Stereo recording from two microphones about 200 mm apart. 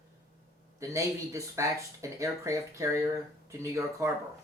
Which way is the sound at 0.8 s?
15° right (ahead or behind).